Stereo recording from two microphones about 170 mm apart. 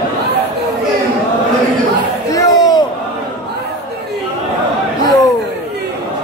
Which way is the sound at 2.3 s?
20° left (ahead or behind).